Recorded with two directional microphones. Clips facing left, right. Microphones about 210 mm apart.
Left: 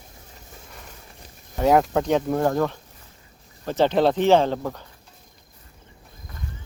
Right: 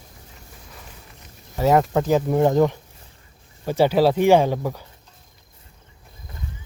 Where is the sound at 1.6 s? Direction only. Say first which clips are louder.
Right 1 dB; centre (ahead or behind).